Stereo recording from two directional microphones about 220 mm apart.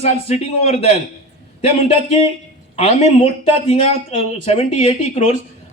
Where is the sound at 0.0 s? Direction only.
30° left (ahead or behind).